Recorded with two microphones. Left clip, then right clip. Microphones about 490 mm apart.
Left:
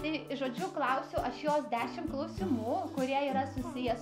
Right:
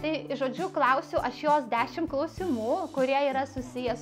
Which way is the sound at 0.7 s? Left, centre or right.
Right.